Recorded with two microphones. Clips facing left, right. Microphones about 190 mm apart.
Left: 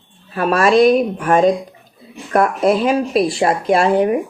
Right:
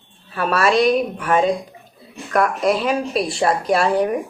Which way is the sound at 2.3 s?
30° left (ahead or behind).